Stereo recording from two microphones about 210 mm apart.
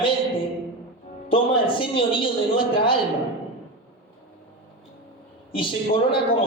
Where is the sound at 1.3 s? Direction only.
25° left (ahead or behind).